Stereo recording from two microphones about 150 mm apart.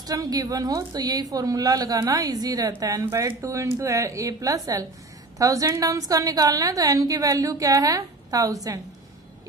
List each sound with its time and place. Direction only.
0.0 s a woman's voice: 25° right (ahead or behind)